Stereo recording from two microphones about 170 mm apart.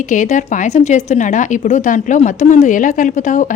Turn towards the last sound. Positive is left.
turn(degrees=50)  # may be behind; listen again after turning